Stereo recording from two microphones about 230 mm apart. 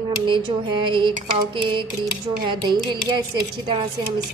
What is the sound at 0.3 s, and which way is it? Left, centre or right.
Music, centre.